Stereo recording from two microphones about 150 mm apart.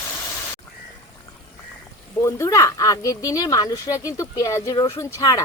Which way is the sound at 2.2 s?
20° left (ahead or behind).